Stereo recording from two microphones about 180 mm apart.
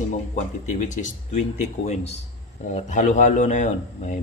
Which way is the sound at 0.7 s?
40° left (ahead or behind).